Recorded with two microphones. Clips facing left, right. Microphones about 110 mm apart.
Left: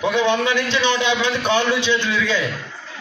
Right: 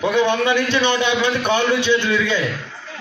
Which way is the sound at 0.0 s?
15° right (ahead or behind).